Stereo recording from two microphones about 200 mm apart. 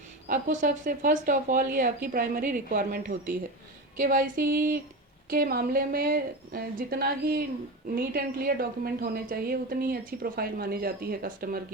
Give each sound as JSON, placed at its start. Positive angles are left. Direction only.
{"t": 0.3, "sound": "speech", "side_deg": -40}
{"t": 3.9, "sound": "a sound", "side_deg": -40}
{"t": 5.3, "sound": "speech", "side_deg": -45}